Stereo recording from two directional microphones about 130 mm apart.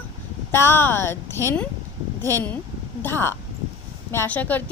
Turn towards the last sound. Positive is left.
turn(degrees=15)  # may be behind; listen again after turning